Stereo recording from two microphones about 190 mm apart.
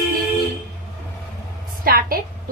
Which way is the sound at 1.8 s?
50° right (ahead or behind).